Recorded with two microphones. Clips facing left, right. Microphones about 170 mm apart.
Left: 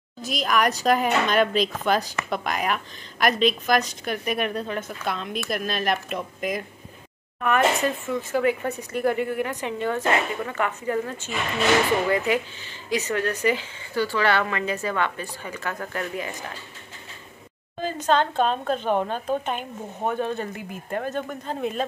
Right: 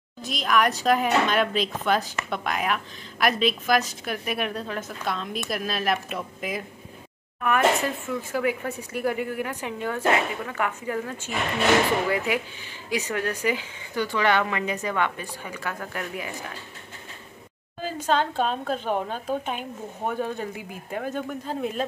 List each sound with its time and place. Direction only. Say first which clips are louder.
0.2 s speech: even; centre (ahead or behind)
17.8 s speech: left 2 dB; 10° right (ahead or behind)